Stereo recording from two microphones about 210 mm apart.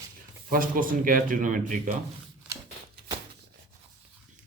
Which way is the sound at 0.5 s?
40° right (ahead or behind).